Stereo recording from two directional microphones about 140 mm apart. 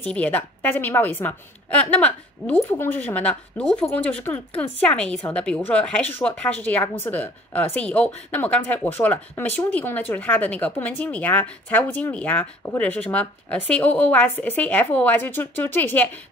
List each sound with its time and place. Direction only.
0.0 s speech: 10° left (ahead or behind)